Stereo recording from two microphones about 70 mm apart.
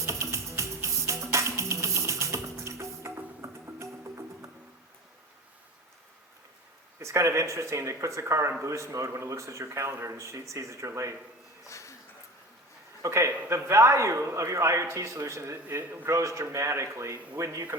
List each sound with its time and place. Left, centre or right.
0.0 s music: right
7.0 s a man's voice: right
11.6 s a sound: left
13.0 s a man's voice: right